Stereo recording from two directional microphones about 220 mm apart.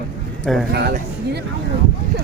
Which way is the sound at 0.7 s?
45° right (ahead or behind).